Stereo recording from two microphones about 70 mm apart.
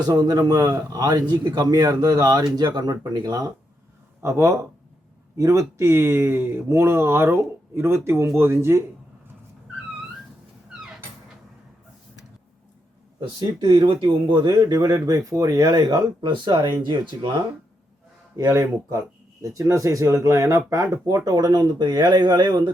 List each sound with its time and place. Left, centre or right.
0.0 s speech: right
4.2 s speech: right
13.1 s speech: right
18.3 s speech: right
21.1 s speech: right